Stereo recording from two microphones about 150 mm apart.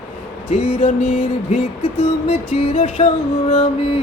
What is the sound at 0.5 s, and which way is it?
Music, 55° left (ahead or behind).